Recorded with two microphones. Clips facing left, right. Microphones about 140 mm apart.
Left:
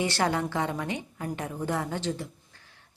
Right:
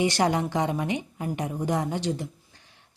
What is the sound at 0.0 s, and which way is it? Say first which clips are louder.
Speech: right 3 dB; 15° right (ahead or behind).